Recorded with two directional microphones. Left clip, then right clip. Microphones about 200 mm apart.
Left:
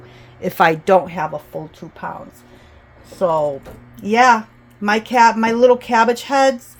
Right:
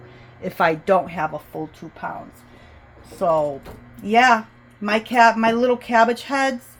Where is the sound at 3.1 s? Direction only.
35° left (ahead or behind).